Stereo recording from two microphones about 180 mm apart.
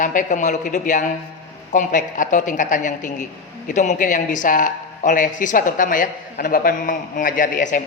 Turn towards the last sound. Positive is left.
turn(degrees=45)  # may be behind; listen again after turning